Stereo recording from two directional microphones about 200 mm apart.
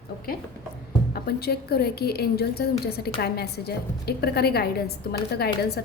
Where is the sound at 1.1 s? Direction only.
50° left (ahead or behind).